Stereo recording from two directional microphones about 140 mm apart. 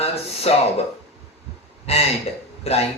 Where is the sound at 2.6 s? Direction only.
45° left (ahead or behind).